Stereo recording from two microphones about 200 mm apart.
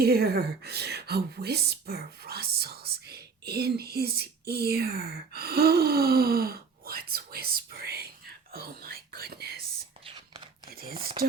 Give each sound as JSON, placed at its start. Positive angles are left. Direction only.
{"t": 0.0, "sound": "speech", "side_deg": -50}
{"t": 10.1, "sound": "whispering", "side_deg": -25}
{"t": 10.7, "sound": "speech", "side_deg": -45}